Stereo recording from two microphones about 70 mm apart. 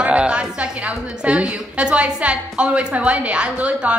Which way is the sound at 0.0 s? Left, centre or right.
Centre.